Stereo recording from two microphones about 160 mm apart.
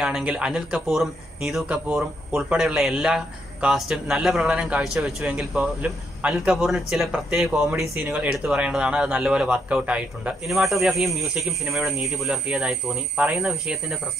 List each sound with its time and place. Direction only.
0.0 s speech: 5° right (ahead or behind)